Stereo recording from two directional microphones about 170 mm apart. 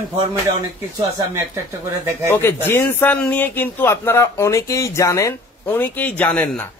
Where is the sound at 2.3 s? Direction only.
15° left (ahead or behind).